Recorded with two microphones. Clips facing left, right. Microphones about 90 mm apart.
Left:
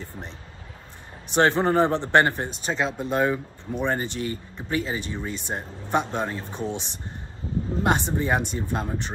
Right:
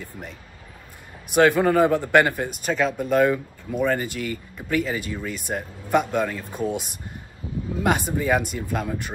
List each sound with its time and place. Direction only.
0.0 s speech: 25° left (ahead or behind)
7.8 s speech: 30° left (ahead or behind)